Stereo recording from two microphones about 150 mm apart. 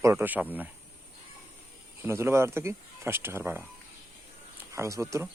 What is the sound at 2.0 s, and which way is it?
Speech, 15° right (ahead or behind).